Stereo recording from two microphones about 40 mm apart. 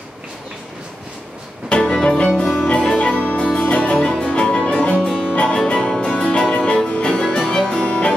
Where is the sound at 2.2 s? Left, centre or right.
Centre.